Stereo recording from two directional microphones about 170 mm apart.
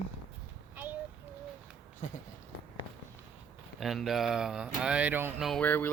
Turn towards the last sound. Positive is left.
turn(degrees=10)  # may be behind; listen again after turning